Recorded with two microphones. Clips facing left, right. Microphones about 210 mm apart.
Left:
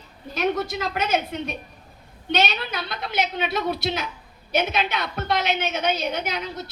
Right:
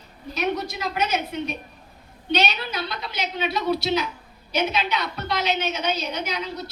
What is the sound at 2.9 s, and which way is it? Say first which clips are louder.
A woman's voice: left 4 dB; 50° left (ahead or behind).